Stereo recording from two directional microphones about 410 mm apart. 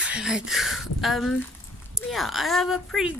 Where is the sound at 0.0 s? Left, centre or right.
Centre.